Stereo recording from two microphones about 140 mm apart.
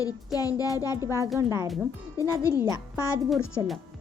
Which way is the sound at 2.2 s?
20° left (ahead or behind).